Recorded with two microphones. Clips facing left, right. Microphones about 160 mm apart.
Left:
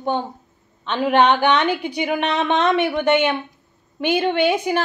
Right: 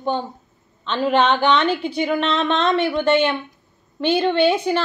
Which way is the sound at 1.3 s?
15° left (ahead or behind).